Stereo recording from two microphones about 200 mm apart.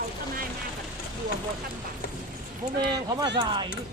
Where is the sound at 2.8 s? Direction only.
20° right (ahead or behind).